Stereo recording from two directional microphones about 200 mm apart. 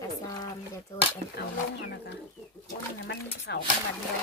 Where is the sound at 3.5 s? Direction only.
55° left (ahead or behind).